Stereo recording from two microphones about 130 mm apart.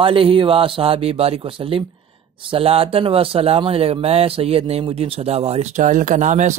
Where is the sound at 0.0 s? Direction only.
45° right (ahead or behind).